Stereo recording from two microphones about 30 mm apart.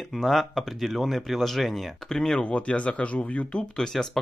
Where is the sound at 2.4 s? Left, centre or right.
Left.